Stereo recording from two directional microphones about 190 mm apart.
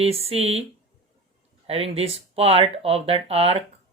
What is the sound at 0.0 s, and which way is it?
Speech, 30° right (ahead or behind).